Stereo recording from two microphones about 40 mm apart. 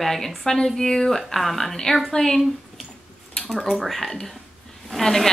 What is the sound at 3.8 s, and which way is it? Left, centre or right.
A woman's voice, centre.